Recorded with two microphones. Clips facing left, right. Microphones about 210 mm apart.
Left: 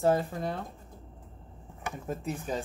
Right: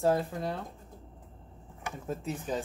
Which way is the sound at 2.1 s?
Centre (ahead or behind).